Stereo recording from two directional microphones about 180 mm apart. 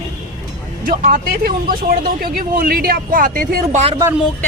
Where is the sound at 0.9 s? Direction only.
50° right (ahead or behind).